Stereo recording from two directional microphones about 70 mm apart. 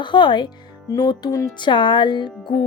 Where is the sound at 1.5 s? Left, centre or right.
Left.